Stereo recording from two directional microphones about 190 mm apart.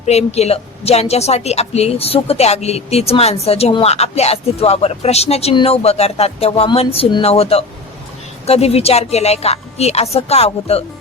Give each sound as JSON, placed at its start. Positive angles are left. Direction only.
{"t": 0.0, "sound": "a woman's voice", "side_deg": 35}